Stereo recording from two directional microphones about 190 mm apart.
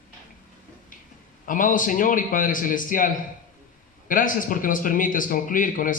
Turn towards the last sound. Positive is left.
turn(degrees=45)  # may be behind; listen again after turning